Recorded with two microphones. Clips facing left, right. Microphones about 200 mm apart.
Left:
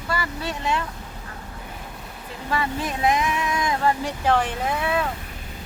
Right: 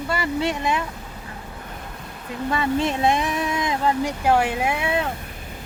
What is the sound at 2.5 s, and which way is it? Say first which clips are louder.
Speech: right 4 dB; 25° right (ahead or behind).